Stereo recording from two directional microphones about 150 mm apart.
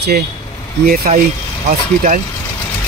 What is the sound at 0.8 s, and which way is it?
Speech, 75° right (ahead or behind).